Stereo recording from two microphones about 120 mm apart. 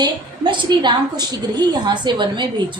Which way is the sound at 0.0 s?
40° right (ahead or behind).